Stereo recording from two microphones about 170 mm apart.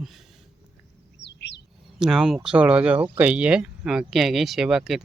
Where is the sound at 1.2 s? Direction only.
90° left.